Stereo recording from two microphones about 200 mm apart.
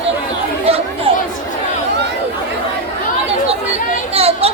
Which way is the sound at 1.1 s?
30° right (ahead or behind).